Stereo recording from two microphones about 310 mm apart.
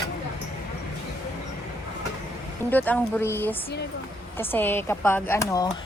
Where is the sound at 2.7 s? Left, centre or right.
Centre.